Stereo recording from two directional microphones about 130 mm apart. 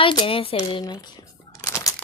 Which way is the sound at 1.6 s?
25° left (ahead or behind).